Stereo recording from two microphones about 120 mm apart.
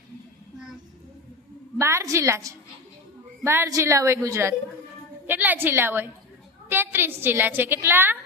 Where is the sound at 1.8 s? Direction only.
25° right (ahead or behind).